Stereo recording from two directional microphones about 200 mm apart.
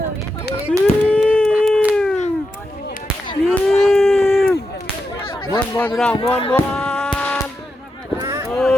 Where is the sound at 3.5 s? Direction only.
Centre (ahead or behind).